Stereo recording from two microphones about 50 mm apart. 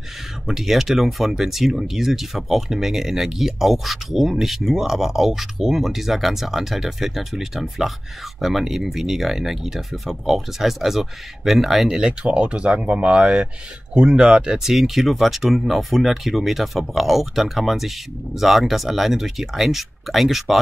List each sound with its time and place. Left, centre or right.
0.5 s speech: centre